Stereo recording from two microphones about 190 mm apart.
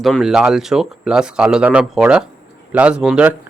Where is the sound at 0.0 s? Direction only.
Centre (ahead or behind).